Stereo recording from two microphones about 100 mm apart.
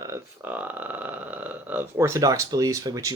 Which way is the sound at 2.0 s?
30° right (ahead or behind).